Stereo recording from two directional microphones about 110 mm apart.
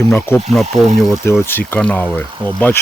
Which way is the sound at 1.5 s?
15° left (ahead or behind).